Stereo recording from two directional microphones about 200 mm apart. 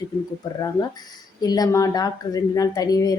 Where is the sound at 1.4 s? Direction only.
20° left (ahead or behind).